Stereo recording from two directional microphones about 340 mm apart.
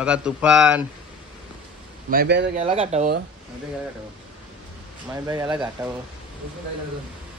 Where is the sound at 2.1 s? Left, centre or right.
Right.